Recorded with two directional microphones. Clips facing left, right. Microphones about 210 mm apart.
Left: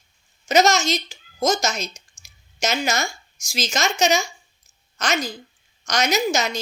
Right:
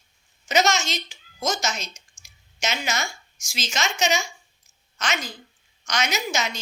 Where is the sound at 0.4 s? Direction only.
40° left (ahead or behind).